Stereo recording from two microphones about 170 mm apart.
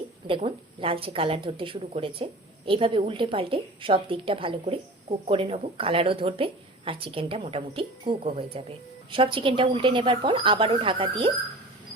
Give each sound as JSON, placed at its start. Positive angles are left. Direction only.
{"t": 0.3, "sound": "a woman's voice", "side_deg": -30}